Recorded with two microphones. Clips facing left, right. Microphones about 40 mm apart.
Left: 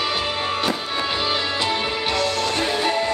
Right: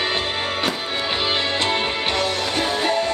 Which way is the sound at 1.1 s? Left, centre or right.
Right.